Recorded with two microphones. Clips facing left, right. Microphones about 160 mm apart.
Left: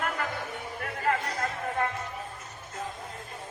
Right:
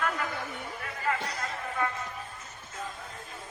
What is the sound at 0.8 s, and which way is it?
Music, 55° left (ahead or behind).